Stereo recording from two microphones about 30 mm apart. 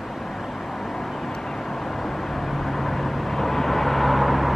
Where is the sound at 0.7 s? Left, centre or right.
Centre.